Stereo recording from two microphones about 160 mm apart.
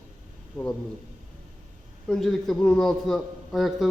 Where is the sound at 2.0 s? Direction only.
5° left (ahead or behind).